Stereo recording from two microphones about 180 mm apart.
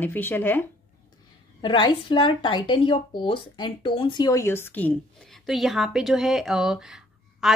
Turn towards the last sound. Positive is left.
turn(degrees=0)  # may be behind; listen again after turning